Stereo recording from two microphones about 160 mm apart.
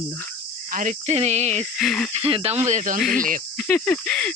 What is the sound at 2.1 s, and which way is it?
Speech, 35° right (ahead or behind).